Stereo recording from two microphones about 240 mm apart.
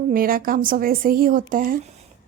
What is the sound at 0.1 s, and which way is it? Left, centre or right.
Speech, right.